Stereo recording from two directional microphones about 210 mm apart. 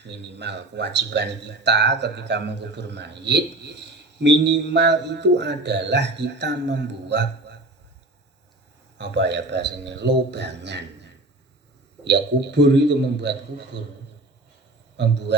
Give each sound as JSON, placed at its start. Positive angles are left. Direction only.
{"t": 0.0, "sound": "speech", "side_deg": -55}
{"t": 9.0, "sound": "speech", "side_deg": -55}
{"t": 14.9, "sound": "a man's voice", "side_deg": -55}